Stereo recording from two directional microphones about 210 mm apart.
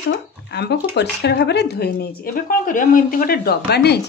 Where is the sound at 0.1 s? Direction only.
55° left (ahead or behind).